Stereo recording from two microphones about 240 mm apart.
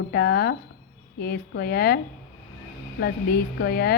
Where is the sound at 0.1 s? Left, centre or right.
Left.